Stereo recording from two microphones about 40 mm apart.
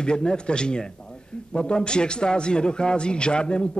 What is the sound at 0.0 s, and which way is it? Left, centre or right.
A man's voice, left.